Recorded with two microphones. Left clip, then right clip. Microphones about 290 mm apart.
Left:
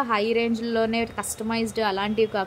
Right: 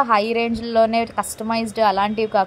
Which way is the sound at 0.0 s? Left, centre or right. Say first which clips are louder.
Right 5 dB; centre.